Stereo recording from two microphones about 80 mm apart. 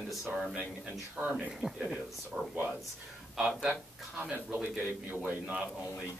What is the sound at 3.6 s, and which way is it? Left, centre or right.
Speech, centre.